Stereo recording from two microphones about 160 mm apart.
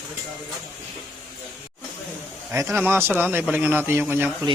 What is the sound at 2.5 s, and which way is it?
A man's voice, 20° right (ahead or behind).